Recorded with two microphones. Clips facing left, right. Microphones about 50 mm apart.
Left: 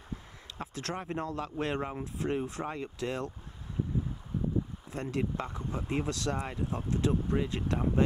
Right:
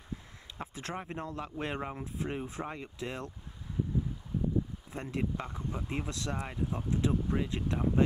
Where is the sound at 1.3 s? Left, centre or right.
Centre.